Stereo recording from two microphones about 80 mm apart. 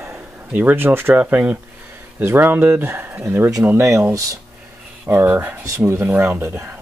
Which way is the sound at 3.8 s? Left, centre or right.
Right.